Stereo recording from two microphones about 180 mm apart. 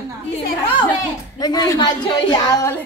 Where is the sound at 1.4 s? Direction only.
20° left (ahead or behind).